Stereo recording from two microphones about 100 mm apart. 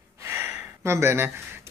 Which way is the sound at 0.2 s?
25° right (ahead or behind).